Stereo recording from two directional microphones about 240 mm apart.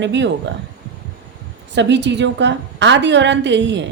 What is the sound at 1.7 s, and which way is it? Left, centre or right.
A woman's voice, right.